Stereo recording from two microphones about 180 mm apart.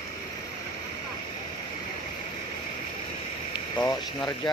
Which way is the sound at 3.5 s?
20° left (ahead or behind).